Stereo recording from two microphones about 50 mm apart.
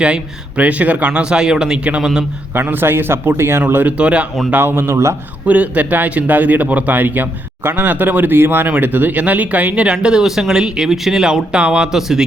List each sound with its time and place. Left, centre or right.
0.0 s a man's voice: right
1.2 s speech: centre
2.6 s speech: right
3.7 s speech: right
3.9 s a man's voice: right
4.5 s speech: right
5.5 s a man's voice: right
11.9 s speech: centre